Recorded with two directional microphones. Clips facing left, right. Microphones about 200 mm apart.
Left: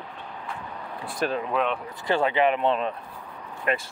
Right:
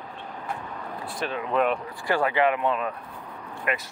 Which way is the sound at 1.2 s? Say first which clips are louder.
Left 5 dB; 45° left (ahead or behind).